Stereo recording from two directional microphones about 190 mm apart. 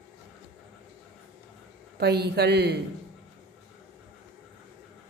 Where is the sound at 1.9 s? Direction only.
60° right (ahead or behind).